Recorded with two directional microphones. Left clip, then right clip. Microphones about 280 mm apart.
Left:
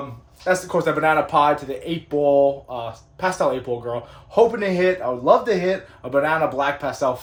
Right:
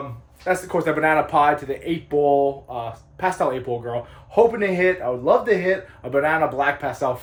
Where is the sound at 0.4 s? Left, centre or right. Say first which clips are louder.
Left 1 dB; centre.